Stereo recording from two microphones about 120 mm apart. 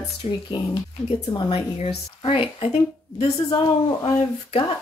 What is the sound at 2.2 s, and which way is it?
Speech, 50° left (ahead or behind).